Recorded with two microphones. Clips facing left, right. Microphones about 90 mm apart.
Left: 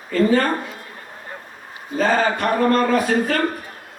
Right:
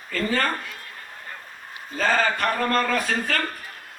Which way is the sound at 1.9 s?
35° left (ahead or behind).